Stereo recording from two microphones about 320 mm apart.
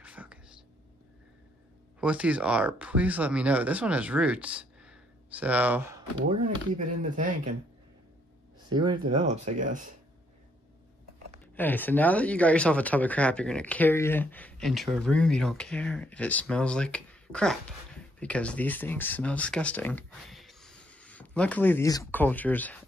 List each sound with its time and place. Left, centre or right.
0.0 s whispering: centre
2.0 s speech: centre
6.2 s speech: right
8.6 s speech: centre
11.5 s speech: centre